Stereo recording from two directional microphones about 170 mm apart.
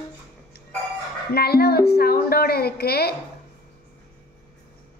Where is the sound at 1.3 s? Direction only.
65° left (ahead or behind).